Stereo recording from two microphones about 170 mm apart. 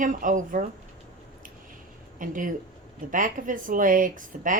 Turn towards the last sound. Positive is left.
turn(degrees=-50)  # may be behind; listen again after turning